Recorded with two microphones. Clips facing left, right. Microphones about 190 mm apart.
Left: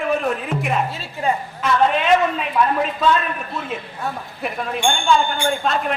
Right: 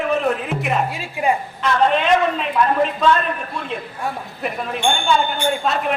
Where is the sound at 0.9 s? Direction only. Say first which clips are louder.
Right 2 dB; 10° right (ahead or behind).